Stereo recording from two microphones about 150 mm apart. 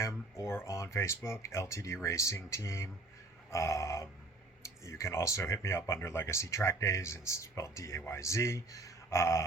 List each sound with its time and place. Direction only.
0.0 s speech: 20° left (ahead or behind)